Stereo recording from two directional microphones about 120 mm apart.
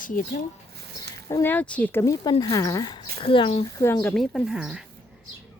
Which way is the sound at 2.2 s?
35° left (ahead or behind).